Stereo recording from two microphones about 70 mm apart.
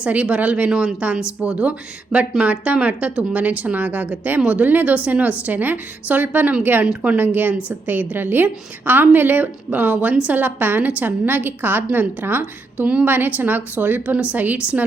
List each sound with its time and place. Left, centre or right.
0.0 s a woman's voice: centre